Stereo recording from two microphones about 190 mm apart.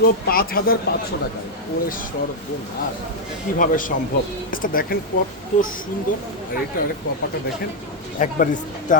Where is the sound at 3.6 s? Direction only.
45° left (ahead or behind).